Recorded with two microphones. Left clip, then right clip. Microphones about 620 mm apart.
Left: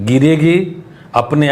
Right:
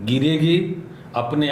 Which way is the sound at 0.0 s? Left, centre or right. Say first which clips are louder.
Left 8 dB; left.